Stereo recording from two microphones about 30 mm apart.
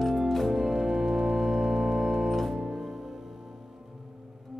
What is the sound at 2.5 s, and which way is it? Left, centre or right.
Music, centre.